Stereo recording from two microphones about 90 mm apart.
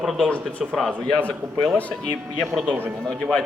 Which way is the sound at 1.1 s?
15° left (ahead or behind).